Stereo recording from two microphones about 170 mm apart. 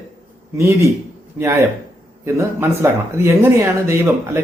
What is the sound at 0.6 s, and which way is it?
A man's voice, 20° right (ahead or behind).